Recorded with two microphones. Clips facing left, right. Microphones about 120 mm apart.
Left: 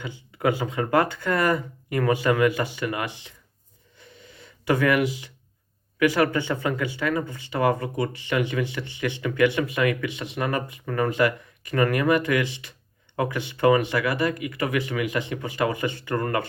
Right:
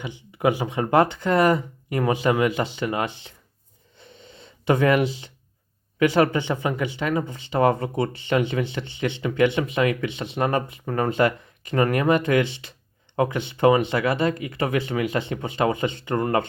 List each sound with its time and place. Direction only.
0.0 s speech: 20° right (ahead or behind)
3.9 s gasp: 25° right (ahead or behind)
6.0 s speech: 25° right (ahead or behind)